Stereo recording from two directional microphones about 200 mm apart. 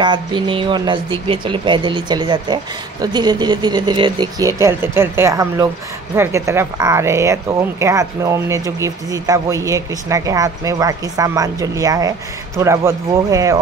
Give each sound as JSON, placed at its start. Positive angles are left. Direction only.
{"t": 0.0, "sound": "speech", "side_deg": -20}